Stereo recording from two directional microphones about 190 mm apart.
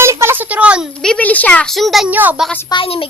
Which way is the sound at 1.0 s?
5° left (ahead or behind).